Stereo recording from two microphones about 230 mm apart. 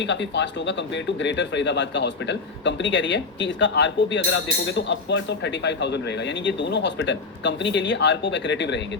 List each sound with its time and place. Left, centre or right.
0.0 s speech: left